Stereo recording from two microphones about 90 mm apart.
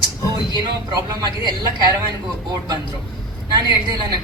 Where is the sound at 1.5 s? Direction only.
50° right (ahead or behind).